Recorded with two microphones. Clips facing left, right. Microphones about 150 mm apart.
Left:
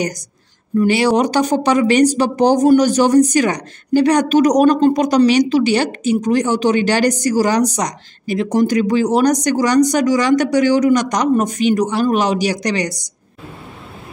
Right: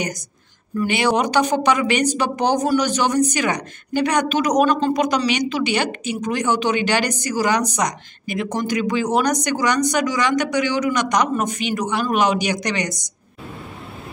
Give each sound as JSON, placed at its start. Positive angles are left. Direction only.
{"t": 0.7, "sound": "speech", "side_deg": 40}